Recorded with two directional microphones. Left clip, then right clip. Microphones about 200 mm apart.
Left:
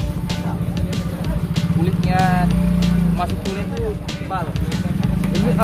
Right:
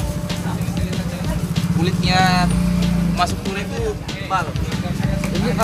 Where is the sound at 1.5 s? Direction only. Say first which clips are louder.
Even; 5° left (ahead or behind).